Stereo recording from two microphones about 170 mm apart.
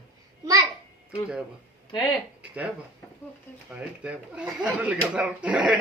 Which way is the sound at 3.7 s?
5° right (ahead or behind).